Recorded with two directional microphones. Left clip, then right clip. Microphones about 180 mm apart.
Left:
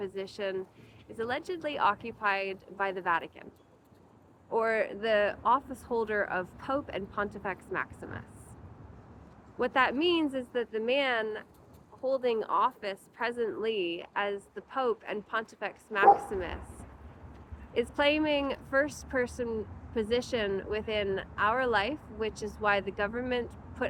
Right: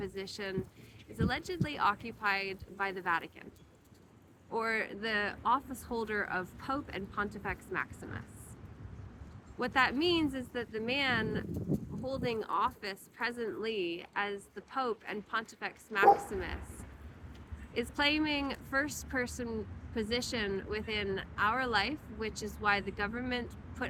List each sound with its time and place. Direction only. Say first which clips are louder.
0.0 s speech: left 5 dB; 15° right (ahead or behind)
4.5 s speech: left 5 dB; 20° right (ahead or behind)
9.6 s speech: left 3 dB; 20° right (ahead or behind)
17.7 s speech: left 4 dB; 15° right (ahead or behind)